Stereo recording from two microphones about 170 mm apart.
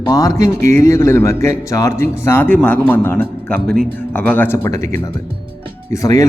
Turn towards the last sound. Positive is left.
turn(degrees=20)  # may be behind; listen again after turning